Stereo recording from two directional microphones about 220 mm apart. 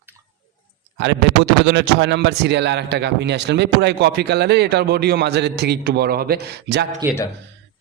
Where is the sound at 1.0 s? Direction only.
55° right (ahead or behind).